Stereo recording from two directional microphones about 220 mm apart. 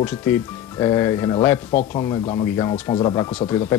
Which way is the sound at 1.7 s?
35° left (ahead or behind).